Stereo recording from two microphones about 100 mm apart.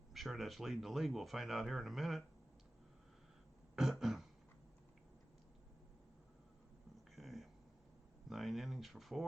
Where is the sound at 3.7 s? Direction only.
5° right (ahead or behind).